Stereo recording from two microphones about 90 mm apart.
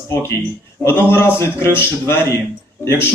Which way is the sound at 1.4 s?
25° left (ahead or behind).